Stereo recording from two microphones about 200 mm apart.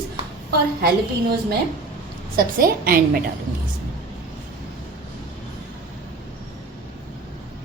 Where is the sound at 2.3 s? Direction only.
45° right (ahead or behind).